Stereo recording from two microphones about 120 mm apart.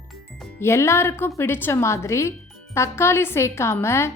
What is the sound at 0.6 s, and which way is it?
Speech, 20° left (ahead or behind).